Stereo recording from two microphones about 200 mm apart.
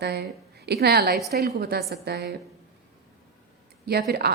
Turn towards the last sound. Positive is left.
turn(degrees=-50)  # may be behind; listen again after turning